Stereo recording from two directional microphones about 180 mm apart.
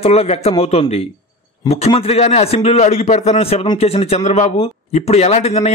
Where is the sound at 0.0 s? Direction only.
35° left (ahead or behind).